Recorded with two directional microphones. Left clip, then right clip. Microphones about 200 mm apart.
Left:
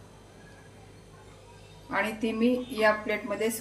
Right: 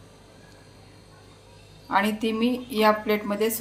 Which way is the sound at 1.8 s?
40° right (ahead or behind).